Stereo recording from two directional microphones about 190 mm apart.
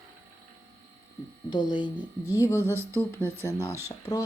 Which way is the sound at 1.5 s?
25° left (ahead or behind).